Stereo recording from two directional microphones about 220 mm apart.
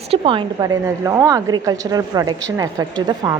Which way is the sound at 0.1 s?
25° right (ahead or behind).